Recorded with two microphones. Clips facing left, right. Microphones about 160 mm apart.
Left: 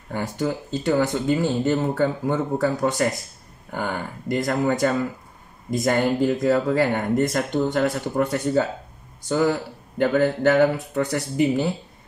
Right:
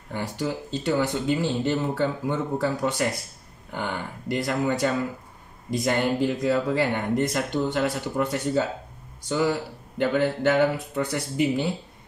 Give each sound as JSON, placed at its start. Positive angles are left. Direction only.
{"t": 0.1, "sound": "speech", "side_deg": 50}